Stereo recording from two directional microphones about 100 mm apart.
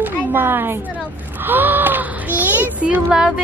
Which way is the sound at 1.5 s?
20° right (ahead or behind).